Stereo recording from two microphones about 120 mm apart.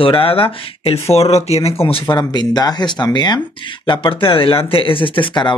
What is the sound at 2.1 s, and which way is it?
Speech, 35° left (ahead or behind).